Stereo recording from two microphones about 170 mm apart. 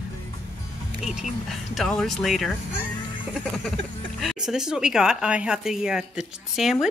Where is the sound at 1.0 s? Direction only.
Centre (ahead or behind).